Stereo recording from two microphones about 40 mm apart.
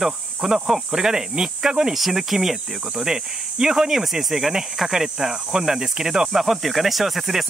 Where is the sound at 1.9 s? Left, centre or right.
Centre.